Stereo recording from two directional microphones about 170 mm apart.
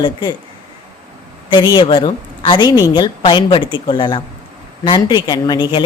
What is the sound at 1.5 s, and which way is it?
Speech, 25° left (ahead or behind).